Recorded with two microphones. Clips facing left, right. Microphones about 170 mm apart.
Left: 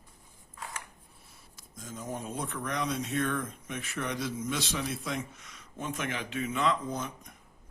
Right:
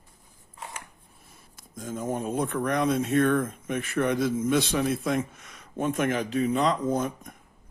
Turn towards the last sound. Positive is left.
turn(degrees=-50)  # may be behind; listen again after turning